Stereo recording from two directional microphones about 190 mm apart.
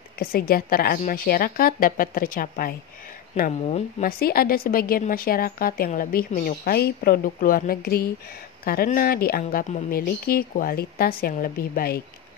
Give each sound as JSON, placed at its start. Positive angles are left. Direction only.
{"t": 0.2, "sound": "a woman's voice", "side_deg": 50}
{"t": 4.0, "sound": "a woman's voice", "side_deg": 50}